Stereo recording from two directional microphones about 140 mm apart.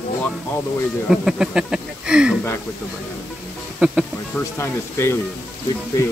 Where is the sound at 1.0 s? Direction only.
5° right (ahead or behind).